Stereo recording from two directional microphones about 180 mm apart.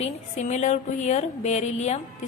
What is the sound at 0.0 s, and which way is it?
A woman's voice, 40° left (ahead or behind).